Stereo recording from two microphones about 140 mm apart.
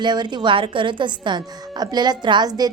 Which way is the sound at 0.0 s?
30° right (ahead or behind).